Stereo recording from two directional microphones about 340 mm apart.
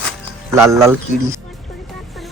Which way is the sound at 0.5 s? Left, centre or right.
Centre.